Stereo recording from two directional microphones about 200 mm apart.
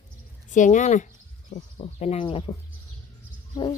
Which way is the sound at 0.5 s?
40° left (ahead or behind).